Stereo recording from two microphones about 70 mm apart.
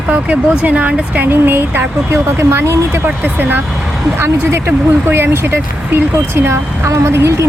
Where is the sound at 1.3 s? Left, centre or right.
Right.